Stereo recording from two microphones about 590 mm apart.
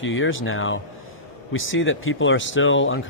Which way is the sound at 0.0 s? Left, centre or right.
Centre.